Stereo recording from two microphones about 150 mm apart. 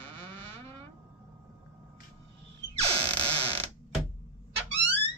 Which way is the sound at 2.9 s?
40° right (ahead or behind).